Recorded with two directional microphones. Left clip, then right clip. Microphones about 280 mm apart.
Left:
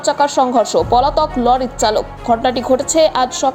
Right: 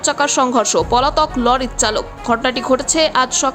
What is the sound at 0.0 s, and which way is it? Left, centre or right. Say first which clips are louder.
A woman's voice: left 2 dB; centre.